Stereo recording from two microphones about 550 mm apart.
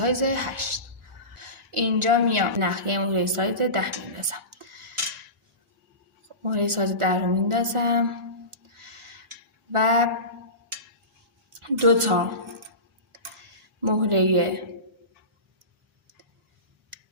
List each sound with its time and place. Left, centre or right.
0.0 s a woman's voice: right
6.4 s a woman's voice: right
9.7 s a woman's voice: right
11.6 s a woman's voice: right
13.8 s a woman's voice: right